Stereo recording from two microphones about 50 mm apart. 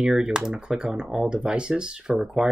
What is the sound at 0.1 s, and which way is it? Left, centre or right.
Speech, centre.